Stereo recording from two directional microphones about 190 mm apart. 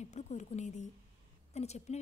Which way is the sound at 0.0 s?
40° left (ahead or behind).